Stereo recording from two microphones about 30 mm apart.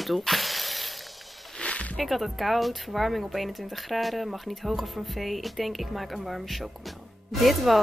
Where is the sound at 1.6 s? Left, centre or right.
Left.